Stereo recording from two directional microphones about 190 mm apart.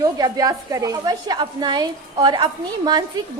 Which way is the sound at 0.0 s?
20° right (ahead or behind).